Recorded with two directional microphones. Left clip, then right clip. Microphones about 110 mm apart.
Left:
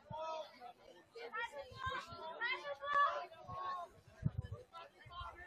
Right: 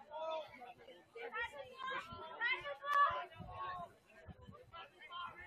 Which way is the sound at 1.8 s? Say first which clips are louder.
Left 1 dB; 35° left (ahead or behind).